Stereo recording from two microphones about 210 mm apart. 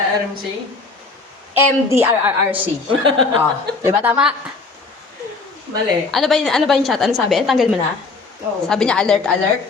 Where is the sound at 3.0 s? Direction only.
25° right (ahead or behind).